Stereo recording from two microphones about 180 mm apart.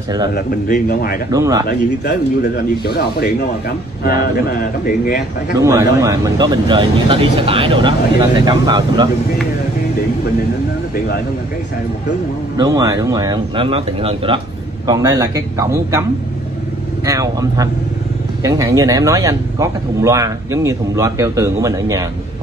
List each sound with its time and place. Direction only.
0.3 s speech: 55° left (ahead or behind)
1.3 s speech: 20° right (ahead or behind)
1.7 s speech: 65° left (ahead or behind)
5.6 s speech: 15° right (ahead or behind)
12.5 s speech: 20° right (ahead or behind)
14.9 s speech: 20° right (ahead or behind)
17.0 s speech: 20° right (ahead or behind)